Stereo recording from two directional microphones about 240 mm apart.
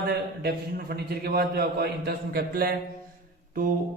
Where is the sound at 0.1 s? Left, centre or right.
Right.